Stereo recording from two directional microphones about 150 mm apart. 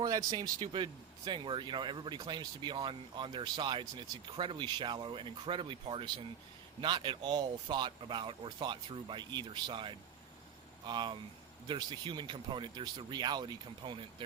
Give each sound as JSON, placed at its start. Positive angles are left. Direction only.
{"t": 0.0, "sound": "speech", "side_deg": -25}